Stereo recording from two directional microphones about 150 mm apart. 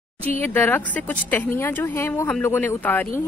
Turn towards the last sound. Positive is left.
turn(degrees=15)  # may be behind; listen again after turning